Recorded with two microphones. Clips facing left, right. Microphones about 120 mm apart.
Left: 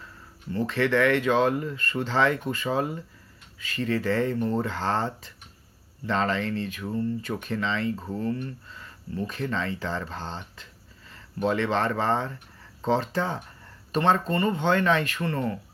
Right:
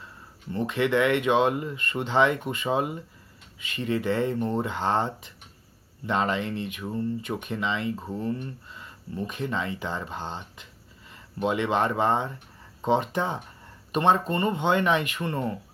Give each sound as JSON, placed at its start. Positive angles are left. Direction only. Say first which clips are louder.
{"t": 0.5, "sound": "speech", "louder": "even", "side_deg": -20}